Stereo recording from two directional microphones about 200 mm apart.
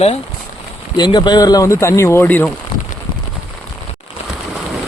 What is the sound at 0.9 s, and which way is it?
Speech, 20° left (ahead or behind).